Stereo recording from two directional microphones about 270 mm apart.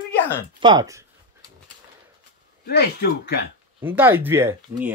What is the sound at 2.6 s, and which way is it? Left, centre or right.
Speech, left.